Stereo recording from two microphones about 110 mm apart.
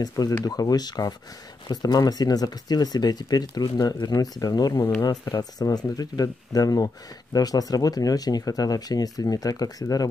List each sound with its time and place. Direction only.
0.4 s speech: 35° left (ahead or behind)